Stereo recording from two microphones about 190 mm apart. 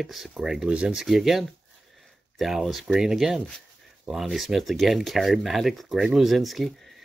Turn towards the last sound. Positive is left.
turn(degrees=0)  # may be behind; listen again after turning